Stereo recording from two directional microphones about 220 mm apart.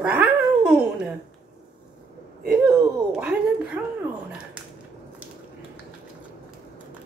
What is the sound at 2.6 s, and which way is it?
Speech, 5° right (ahead or behind).